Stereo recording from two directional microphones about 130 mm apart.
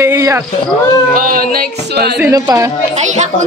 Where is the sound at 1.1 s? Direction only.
90° right.